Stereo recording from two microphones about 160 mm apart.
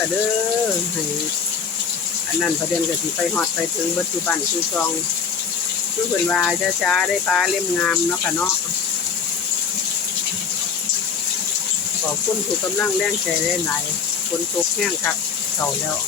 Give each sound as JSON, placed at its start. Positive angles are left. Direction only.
{"t": 6.2, "sound": "speech", "side_deg": 10}